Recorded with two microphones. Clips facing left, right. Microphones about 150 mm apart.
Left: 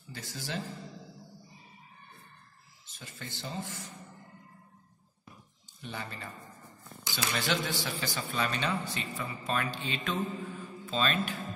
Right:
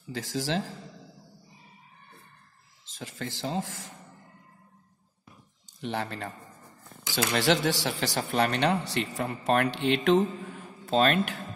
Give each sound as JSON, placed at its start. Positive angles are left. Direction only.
{"t": 0.0, "sound": "speech", "side_deg": -90}
{"t": 2.8, "sound": "speech", "side_deg": -90}
{"t": 5.8, "sound": "speech", "side_deg": -90}
{"t": 7.3, "sound": "speech", "side_deg": -85}